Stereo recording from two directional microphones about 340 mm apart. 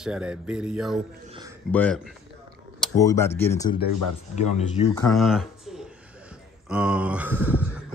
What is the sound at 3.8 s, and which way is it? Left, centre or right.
Speech, left.